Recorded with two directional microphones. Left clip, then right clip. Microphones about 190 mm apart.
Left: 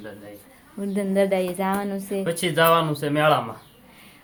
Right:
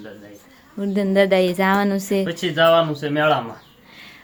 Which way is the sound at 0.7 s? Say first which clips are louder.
Right 5 dB; 20° right (ahead or behind).